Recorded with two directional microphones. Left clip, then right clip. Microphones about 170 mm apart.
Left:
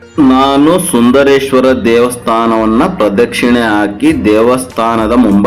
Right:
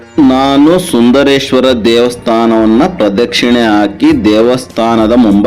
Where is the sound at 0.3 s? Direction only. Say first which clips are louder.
Even; 40° right (ahead or behind).